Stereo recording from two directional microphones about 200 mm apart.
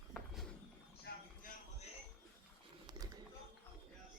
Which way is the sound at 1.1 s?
55° left (ahead or behind).